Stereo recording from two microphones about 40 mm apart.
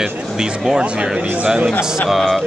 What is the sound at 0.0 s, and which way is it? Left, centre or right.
Speech, centre.